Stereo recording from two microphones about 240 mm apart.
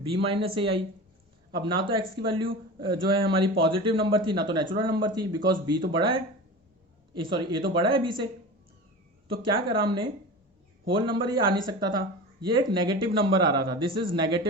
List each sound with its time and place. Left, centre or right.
0.0 s speech: right
9.3 s speech: right